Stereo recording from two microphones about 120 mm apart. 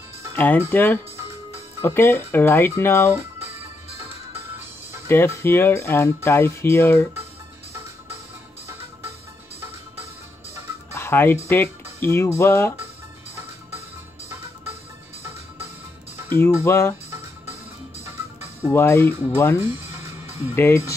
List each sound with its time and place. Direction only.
0.4 s speech: 15° left (ahead or behind)
5.0 s speech: 20° left (ahead or behind)
11.0 s music: 20° left (ahead or behind)
11.4 s speech: 20° left (ahead or behind)
16.3 s speech: 20° left (ahead or behind)
18.7 s speech: 20° left (ahead or behind)